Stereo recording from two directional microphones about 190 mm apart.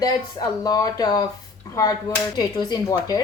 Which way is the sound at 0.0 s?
20° left (ahead or behind).